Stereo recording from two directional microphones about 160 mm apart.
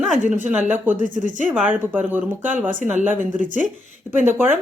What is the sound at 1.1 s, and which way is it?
Speech, 50° left (ahead or behind).